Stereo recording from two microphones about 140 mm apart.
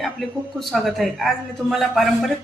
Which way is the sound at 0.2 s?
Centre (ahead or behind).